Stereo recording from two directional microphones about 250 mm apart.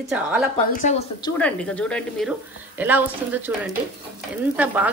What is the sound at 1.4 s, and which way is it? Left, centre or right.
A woman's voice, centre.